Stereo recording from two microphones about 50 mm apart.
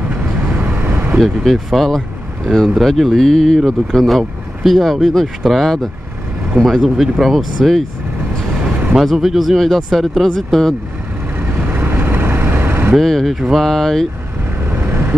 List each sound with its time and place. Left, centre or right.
0.2 s vehicle: right
1.2 s speech: centre
9.0 s speech: centre
11.3 s vehicle: right
13.0 s speech: centre
14.7 s vehicle: right